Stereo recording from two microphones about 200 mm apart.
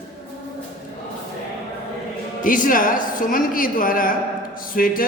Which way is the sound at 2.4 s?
40° left (ahead or behind).